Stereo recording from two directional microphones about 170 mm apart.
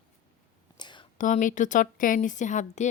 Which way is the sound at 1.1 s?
50° left (ahead or behind).